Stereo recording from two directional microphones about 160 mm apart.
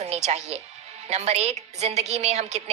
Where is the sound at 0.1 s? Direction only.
45° right (ahead or behind).